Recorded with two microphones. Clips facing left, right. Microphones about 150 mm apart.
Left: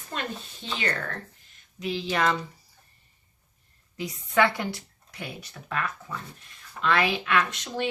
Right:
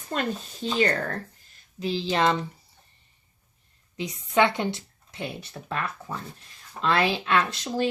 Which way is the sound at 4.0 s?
20° right (ahead or behind).